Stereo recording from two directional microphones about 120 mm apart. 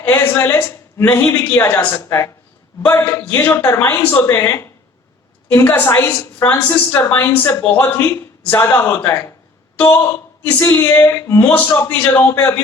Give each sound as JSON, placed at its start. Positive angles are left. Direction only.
{"t": 0.0, "sound": "a woman's voice", "side_deg": 20}